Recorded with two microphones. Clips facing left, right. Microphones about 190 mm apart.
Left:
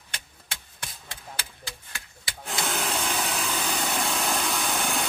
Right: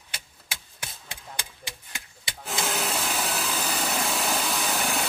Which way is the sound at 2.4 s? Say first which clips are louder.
Right 1 dB; centre (ahead or behind).